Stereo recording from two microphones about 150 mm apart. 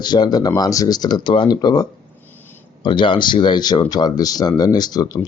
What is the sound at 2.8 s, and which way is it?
Speech, 30° left (ahead or behind).